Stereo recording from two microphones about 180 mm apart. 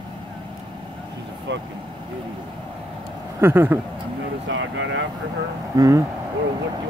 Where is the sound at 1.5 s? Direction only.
80° right.